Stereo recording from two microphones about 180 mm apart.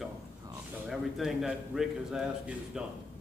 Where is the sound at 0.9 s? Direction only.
Centre (ahead or behind).